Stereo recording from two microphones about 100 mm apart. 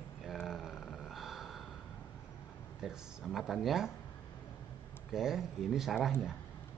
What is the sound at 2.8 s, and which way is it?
A man's voice, 5° right (ahead or behind).